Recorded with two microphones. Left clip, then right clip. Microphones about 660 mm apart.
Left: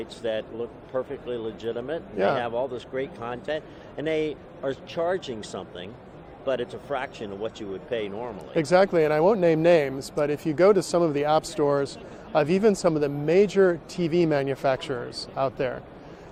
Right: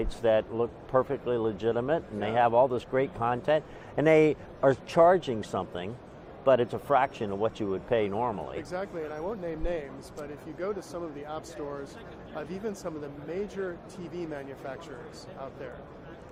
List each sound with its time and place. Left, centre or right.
0.0 s a man's voice: right
8.7 s speech: left